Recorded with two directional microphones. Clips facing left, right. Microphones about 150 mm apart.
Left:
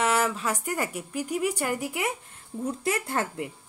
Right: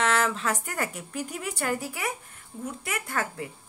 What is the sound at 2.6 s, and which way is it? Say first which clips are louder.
Speech: left 6 dB; 35° left (ahead or behind).